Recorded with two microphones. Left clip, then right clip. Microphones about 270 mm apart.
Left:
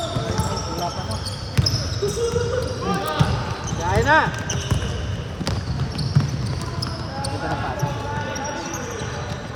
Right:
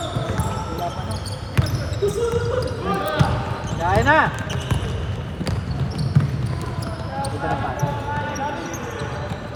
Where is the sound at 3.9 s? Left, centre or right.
Right.